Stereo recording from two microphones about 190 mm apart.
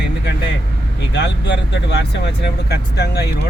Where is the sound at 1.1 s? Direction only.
65° left (ahead or behind).